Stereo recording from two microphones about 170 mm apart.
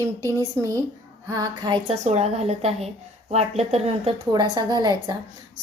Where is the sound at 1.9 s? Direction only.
40° right (ahead or behind).